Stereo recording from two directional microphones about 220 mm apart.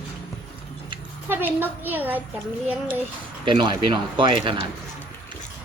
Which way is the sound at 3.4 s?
20° right (ahead or behind).